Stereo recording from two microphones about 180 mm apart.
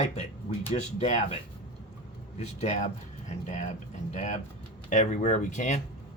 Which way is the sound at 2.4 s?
40° left (ahead or behind).